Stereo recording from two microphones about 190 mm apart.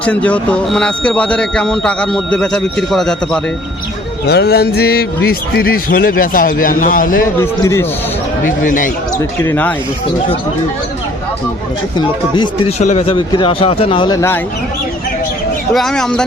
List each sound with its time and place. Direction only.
0.0 s speech: 5° left (ahead or behind)
4.3 s a man's voice: 60° left (ahead or behind)
7.3 s a man's voice: 15° left (ahead or behind)
8.4 s a man's voice: 45° left (ahead or behind)
9.4 s a man's voice: 10° left (ahead or behind)
11.9 s speech: 25° left (ahead or behind)
12.8 s speech: 35° left (ahead or behind); by 14.4 s 15° left (ahead or behind)
15.7 s speech: centre (ahead or behind)